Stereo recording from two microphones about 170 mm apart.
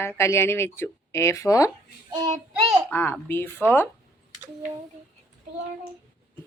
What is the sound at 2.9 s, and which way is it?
Speech, 10° left (ahead or behind).